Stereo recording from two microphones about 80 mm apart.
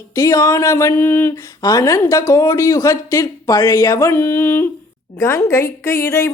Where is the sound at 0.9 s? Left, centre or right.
Left.